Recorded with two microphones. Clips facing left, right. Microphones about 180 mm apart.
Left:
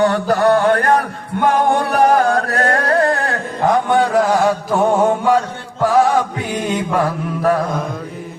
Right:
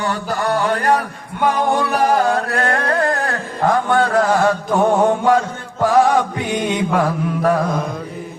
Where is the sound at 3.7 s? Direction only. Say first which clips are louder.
Left 2 dB; 15° left (ahead or behind).